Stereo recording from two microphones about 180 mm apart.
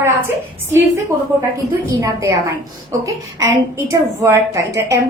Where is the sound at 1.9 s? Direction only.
20° right (ahead or behind).